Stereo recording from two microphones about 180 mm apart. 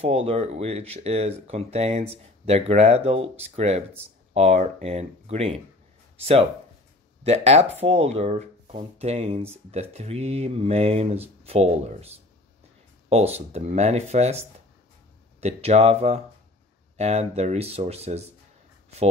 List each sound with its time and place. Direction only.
0.0 s speech: 35° right (ahead or behind)
7.2 s speech: 35° right (ahead or behind)
15.4 s speech: 35° right (ahead or behind)